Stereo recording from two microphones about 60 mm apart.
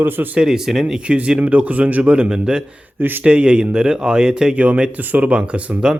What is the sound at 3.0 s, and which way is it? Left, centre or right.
Speech, right.